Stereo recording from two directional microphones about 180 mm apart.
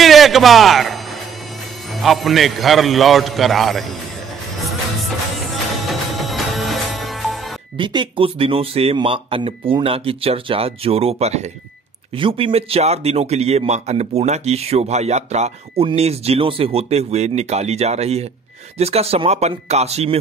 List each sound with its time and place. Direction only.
0.0 s speech: centre (ahead or behind)
2.0 s a man's voice: centre (ahead or behind)
6.1 s music: centre (ahead or behind)
7.7 s speech: 25° right (ahead or behind)